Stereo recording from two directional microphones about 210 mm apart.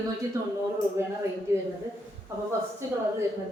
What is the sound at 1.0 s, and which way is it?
Speech, 10° right (ahead or behind).